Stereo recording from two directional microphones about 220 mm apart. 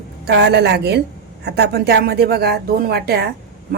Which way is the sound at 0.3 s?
50° right (ahead or behind).